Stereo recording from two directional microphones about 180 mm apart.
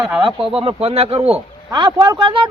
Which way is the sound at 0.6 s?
35° right (ahead or behind).